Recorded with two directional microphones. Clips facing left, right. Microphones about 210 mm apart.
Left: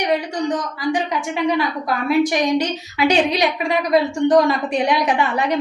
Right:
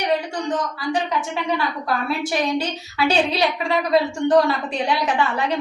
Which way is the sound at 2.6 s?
15° left (ahead or behind).